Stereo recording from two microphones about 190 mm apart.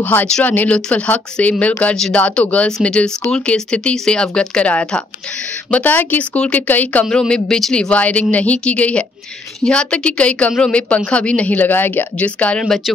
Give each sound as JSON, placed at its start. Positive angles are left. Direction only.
{"t": 0.0, "sound": "speech", "side_deg": 10}